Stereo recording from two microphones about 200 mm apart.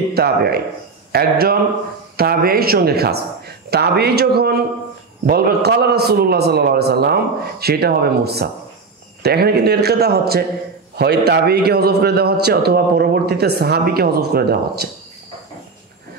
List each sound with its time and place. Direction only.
0.1 s a man's voice: 50° right (ahead or behind)